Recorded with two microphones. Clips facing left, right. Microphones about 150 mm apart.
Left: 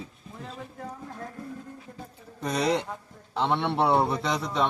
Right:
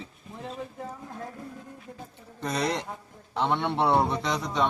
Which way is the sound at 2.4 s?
5° left (ahead or behind).